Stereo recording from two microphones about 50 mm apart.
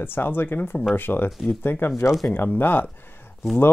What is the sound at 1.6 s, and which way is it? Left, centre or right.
Speech, left.